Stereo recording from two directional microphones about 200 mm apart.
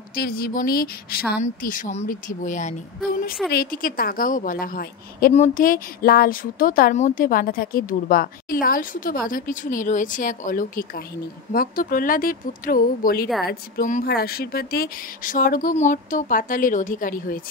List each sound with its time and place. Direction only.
0.1 s a woman's voice: 50° left (ahead or behind)